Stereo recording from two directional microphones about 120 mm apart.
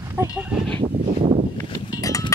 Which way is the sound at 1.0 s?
55° right (ahead or behind).